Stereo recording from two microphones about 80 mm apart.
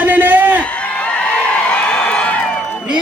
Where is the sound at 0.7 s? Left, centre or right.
Centre.